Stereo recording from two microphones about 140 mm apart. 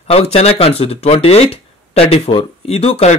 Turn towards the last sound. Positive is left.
turn(degrees=50)  # may be behind; listen again after turning